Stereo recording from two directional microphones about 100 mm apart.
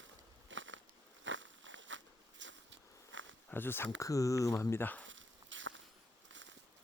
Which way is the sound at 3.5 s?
20° left (ahead or behind).